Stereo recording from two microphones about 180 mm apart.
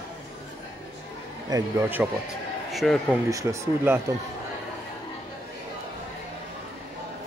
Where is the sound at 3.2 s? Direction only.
15° right (ahead or behind).